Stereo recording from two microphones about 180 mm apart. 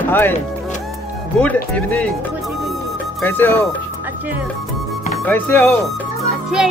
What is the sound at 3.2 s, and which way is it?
Speech, 10° left (ahead or behind).